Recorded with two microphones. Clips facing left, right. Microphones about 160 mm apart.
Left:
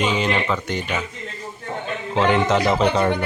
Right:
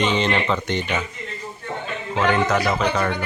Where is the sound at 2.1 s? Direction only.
25° left (ahead or behind).